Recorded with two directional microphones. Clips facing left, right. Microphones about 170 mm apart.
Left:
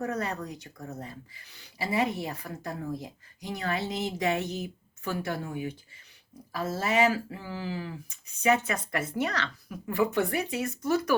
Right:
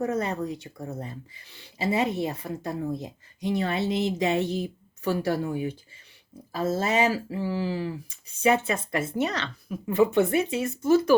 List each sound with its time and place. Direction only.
0.0 s speech: 25° right (ahead or behind)